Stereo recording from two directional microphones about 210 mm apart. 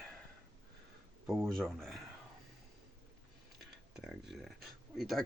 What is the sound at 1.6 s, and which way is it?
Speech, centre (ahead or behind).